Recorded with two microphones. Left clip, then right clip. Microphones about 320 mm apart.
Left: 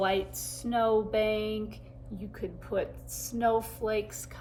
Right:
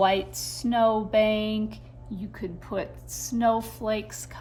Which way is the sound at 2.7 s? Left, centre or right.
Right.